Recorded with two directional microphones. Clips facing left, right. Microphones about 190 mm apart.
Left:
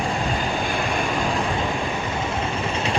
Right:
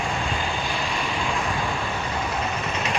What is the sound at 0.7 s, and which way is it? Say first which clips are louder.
Vehicle: left 4 dB; 55° left (ahead or behind).